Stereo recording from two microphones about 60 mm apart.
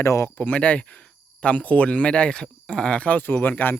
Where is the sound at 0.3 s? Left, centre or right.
Left.